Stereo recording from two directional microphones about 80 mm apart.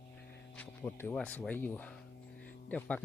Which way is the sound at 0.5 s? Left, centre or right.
Centre.